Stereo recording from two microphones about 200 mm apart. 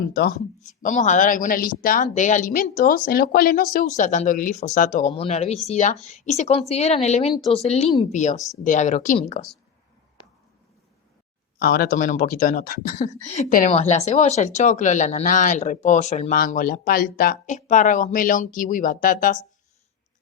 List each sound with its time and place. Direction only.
0.1 s speech: 50° left (ahead or behind)
11.6 s speech: 50° left (ahead or behind)